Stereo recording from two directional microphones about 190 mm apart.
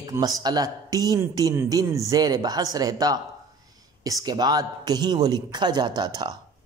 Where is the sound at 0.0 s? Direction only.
20° right (ahead or behind).